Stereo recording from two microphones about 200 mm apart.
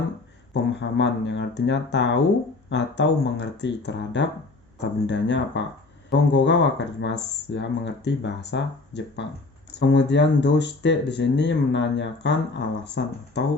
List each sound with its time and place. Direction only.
0.5 s speech: 65° left (ahead or behind)